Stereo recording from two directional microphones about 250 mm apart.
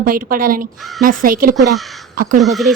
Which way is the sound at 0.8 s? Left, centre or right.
Centre.